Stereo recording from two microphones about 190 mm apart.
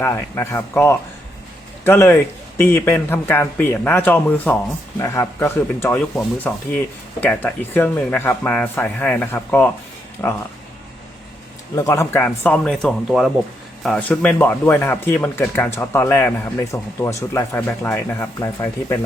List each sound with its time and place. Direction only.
0.0 s speech: 15° left (ahead or behind)
7.2 s speech: 10° left (ahead or behind)
11.7 s speech: 15° left (ahead or behind)